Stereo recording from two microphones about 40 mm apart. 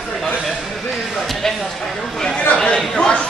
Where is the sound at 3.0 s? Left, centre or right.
Centre.